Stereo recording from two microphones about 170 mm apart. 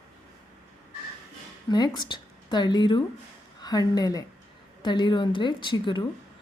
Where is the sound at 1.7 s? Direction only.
25° left (ahead or behind).